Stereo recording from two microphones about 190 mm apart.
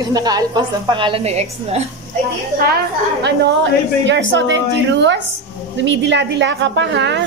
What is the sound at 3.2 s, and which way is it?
A woman's voice, 65° right (ahead or behind).